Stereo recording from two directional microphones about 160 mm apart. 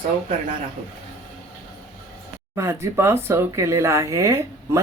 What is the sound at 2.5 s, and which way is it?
Speech, 20° right (ahead or behind).